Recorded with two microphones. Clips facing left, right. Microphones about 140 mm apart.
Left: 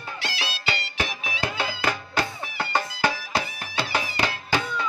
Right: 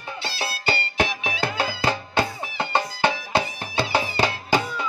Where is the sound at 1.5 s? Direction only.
30° right (ahead or behind).